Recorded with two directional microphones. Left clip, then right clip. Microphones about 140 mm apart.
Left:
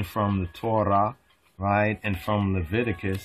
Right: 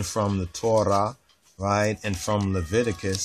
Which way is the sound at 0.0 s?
40° right (ahead or behind).